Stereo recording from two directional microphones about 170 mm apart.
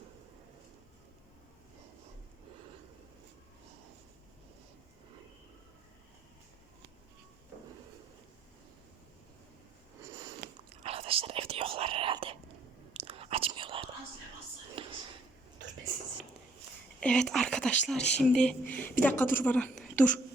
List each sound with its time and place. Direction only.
10.8 s whispering: 35° right (ahead or behind)
14.8 s a sound: 30° right (ahead or behind)
17.0 s speech: 5° left (ahead or behind)
17.9 s speech: 40° left (ahead or behind)
18.2 s a woman's voice: 5° left (ahead or behind)